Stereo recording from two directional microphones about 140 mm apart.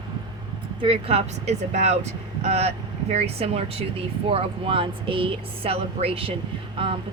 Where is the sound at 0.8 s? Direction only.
45° right (ahead or behind).